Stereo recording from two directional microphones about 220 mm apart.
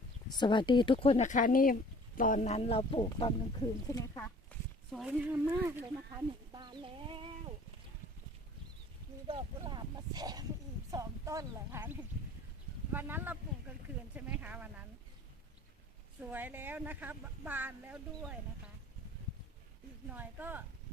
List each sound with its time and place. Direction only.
0.3 s speech: 20° left (ahead or behind)
3.8 s speech: 15° left (ahead or behind)
4.9 s speech: centre (ahead or behind)
6.5 s speech: 20° right (ahead or behind)
9.2 s speech: 20° right (ahead or behind); by 14.7 s 5° right (ahead or behind)
16.3 s speech: 10° right (ahead or behind)
20.1 s speech: 10° right (ahead or behind)